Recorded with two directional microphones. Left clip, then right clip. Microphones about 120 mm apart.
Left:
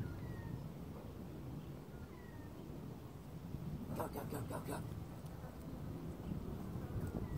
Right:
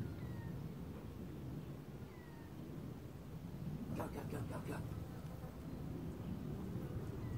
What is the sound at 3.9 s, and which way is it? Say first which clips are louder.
Speech: left 3 dB; 25° left (ahead or behind).